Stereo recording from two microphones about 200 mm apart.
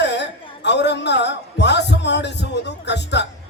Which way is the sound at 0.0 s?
60° left (ahead or behind).